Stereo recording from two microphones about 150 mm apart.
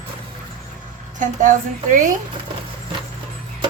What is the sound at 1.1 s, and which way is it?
Speech, 60° right (ahead or behind).